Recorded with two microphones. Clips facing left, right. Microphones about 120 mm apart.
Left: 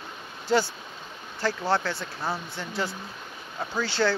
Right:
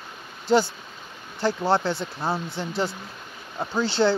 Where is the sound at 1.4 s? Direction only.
25° right (ahead or behind).